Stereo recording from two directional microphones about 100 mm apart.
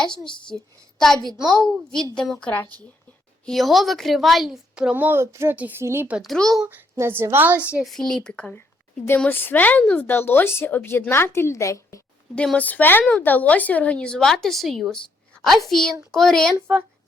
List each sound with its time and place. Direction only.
0.5 s a woman's voice: 5° left (ahead or behind)
2.5 s speech: 15° left (ahead or behind)
3.4 s a woman's voice: centre (ahead or behind); by 5.5 s 25° right (ahead or behind)
5.5 s a woman's voice: 15° right (ahead or behind)
6.2 s a woman's voice: 5° left (ahead or behind)
6.9 s a woman's voice: 25° right (ahead or behind)
7.7 s a woman's voice: 10° right (ahead or behind)
7.9 s a woman's voice: 5° left (ahead or behind); by 12.0 s 30° left (ahead or behind)
12.5 s a woman's voice: 15° left (ahead or behind)